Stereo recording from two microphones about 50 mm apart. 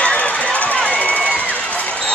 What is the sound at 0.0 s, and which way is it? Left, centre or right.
Run, left.